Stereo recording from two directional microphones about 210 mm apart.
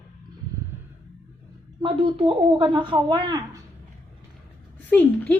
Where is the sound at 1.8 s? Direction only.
25° right (ahead or behind).